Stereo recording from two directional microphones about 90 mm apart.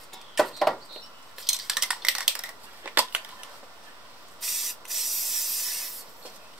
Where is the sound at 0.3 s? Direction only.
Centre (ahead or behind).